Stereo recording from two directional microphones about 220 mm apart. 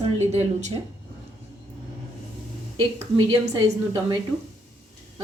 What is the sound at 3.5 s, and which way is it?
Speech, 20° right (ahead or behind).